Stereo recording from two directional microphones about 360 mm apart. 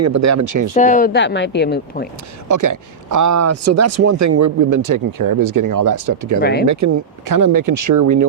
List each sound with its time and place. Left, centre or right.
0.0 s speech: right
0.7 s speech: centre
2.5 s speech: right
6.4 s speech: left
6.7 s speech: right